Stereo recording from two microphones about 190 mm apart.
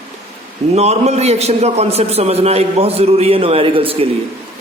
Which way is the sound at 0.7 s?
35° right (ahead or behind).